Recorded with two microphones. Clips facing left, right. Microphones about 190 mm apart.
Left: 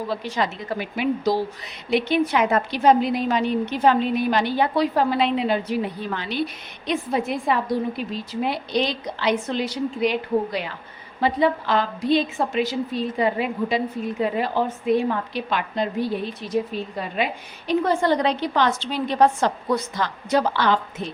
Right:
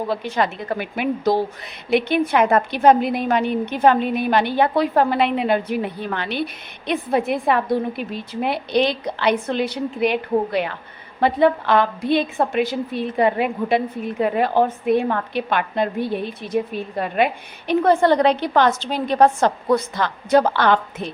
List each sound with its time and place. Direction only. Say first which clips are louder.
0.1 s a woman's voice: right 3 dB; 55° right (ahead or behind)